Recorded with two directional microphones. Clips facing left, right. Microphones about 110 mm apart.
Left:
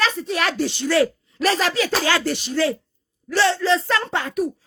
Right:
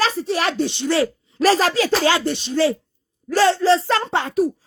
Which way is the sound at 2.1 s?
20° right (ahead or behind).